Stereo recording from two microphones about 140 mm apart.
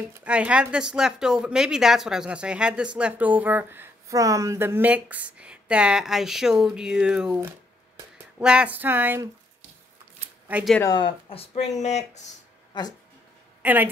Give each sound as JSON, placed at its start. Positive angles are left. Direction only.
{"t": 0.2, "sound": "speech", "side_deg": -10}
{"t": 8.4, "sound": "speech", "side_deg": -5}
{"t": 10.8, "sound": "speech", "side_deg": 30}
{"t": 12.7, "sound": "speech", "side_deg": 30}
{"t": 13.6, "sound": "a sound", "side_deg": -10}